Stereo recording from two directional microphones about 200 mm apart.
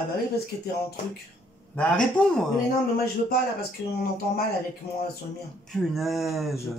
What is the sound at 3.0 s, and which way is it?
Speech, 50° left (ahead or behind).